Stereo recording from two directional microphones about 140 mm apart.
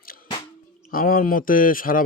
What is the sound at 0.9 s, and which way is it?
Speech, 90° left.